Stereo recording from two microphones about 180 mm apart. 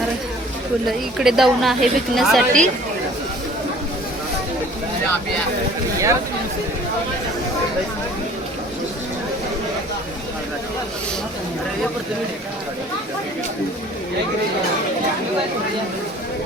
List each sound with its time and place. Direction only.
0.9 s a woman's voice: centre (ahead or behind)